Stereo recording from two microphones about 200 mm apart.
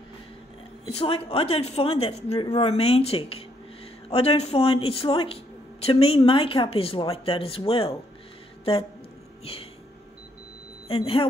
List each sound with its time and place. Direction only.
0.8 s speech: 30° left (ahead or behind)
10.9 s speech: 25° left (ahead or behind)